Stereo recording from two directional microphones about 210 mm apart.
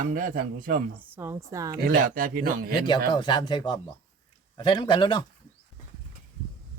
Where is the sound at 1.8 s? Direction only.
40° right (ahead or behind).